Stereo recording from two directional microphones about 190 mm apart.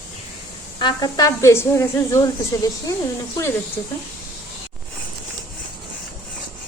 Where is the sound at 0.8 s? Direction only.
20° left (ahead or behind).